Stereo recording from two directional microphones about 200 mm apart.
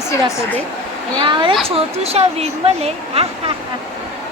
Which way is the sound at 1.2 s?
25° right (ahead or behind).